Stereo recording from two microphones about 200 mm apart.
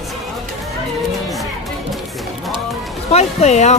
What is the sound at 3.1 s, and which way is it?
Speech, 35° left (ahead or behind).